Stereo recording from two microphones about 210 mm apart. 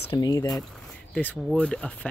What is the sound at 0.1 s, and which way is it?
Speech, 20° left (ahead or behind).